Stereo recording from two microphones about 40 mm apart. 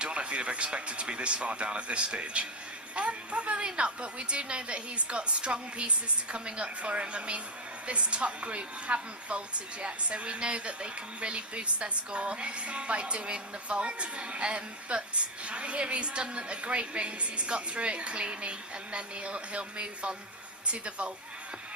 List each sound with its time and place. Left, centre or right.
0.0 s a woman's voice: right